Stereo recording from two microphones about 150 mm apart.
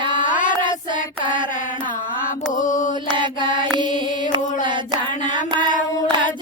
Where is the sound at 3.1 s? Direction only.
30° right (ahead or behind).